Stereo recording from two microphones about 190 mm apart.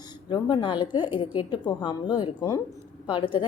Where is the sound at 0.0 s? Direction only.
20° left (ahead or behind).